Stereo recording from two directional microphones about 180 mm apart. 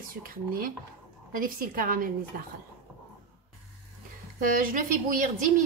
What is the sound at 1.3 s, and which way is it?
Speech, 50° right (ahead or behind).